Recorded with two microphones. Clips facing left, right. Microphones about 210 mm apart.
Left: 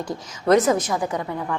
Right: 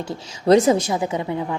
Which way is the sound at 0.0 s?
30° right (ahead or behind).